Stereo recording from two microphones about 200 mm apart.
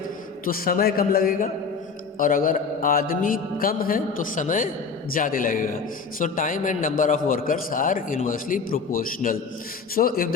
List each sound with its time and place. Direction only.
0.4 s a man's voice: 45° left (ahead or behind)